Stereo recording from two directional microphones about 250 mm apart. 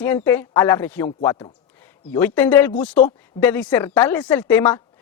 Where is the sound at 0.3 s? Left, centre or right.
Centre.